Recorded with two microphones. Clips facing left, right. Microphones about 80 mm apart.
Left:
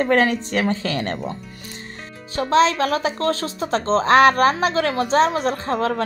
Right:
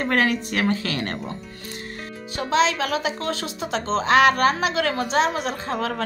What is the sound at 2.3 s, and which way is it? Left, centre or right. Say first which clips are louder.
A woman's voice: left 4 dB; left.